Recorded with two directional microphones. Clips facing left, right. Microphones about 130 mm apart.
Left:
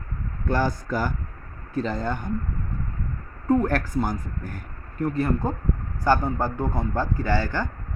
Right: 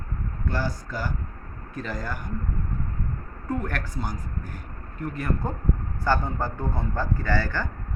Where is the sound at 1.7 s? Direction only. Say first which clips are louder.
Left 6 dB; 30° left (ahead or behind).